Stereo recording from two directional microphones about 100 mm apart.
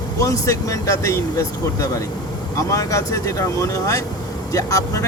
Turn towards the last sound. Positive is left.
turn(degrees=35)  # may be behind; listen again after turning